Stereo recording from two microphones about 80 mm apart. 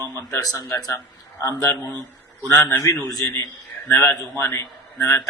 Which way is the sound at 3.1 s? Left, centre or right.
Left.